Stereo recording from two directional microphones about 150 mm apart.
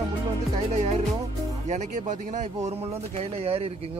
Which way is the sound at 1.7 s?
50° right (ahead or behind).